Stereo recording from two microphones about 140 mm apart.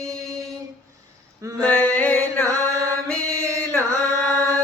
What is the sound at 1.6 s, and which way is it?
Music, 10° left (ahead or behind).